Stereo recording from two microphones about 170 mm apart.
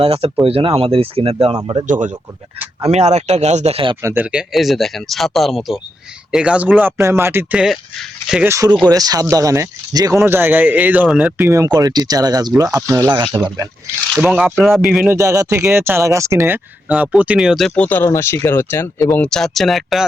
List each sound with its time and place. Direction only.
0.0 s speech: 35° right (ahead or behind)
1.9 s speech: 45° right (ahead or behind)
4.0 s speech: 10° right (ahead or behind)
8.4 s speech: 20° right (ahead or behind)
14.2 s speech: 5° right (ahead or behind)
15.1 s speech: 20° right (ahead or behind); by 19.2 s 15° left (ahead or behind)
19.2 s speech: 5° left (ahead or behind)